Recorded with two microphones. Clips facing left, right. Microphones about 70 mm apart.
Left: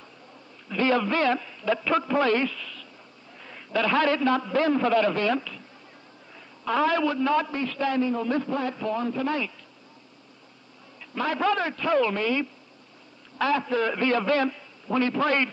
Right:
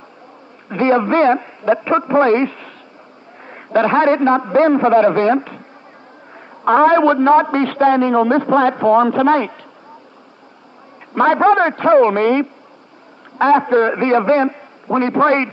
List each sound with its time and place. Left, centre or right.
0.7 s a man's voice: right
11.1 s a man's voice: right